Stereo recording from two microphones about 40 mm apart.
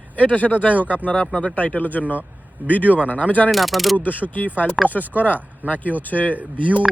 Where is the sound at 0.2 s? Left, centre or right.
Left.